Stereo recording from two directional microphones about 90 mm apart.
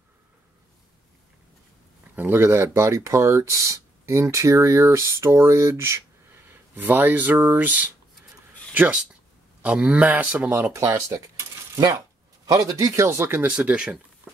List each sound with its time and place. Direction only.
2.1 s speech: 25° right (ahead or behind)
11.1 s coin: 35° right (ahead or behind)
12.4 s speech: 40° right (ahead or behind)
13.4 s speech: 15° right (ahead or behind)